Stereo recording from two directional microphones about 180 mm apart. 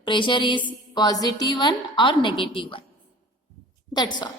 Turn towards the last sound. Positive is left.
turn(degrees=25)  # may be behind; listen again after turning